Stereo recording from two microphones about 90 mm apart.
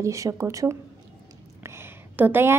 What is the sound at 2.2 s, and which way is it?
Speech, 20° right (ahead or behind).